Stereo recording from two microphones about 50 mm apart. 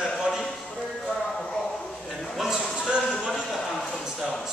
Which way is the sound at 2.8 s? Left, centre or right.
Centre.